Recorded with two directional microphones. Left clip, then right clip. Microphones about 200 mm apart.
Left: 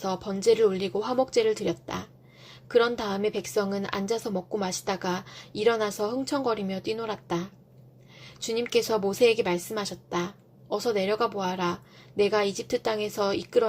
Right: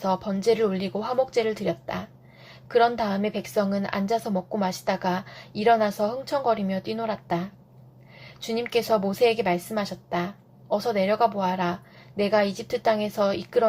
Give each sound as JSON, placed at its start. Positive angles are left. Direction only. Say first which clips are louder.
{"t": 0.0, "sound": "a woman's voice", "louder": "right 2 dB", "side_deg": 35}